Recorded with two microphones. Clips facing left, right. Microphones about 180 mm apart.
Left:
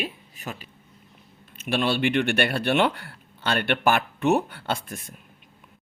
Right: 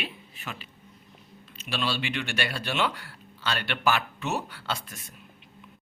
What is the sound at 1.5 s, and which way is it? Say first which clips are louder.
Speech: left 7 dB; 55° left (ahead or behind).